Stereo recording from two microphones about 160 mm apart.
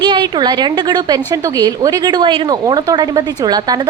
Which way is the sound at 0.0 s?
30° right (ahead or behind).